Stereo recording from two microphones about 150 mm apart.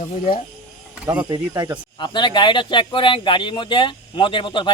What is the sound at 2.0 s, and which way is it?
Speech, 30° left (ahead or behind).